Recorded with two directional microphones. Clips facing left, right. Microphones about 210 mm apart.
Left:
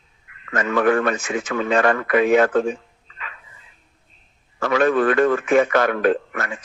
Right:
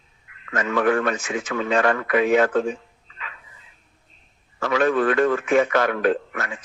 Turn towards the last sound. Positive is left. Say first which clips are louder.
# left 2 dB
turn(degrees=50)  # may be behind; listen again after turning